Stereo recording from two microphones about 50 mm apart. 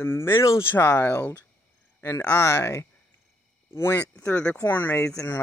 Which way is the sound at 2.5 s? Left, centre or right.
Left.